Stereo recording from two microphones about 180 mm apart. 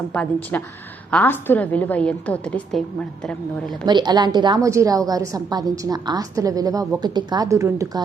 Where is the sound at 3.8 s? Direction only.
25° right (ahead or behind).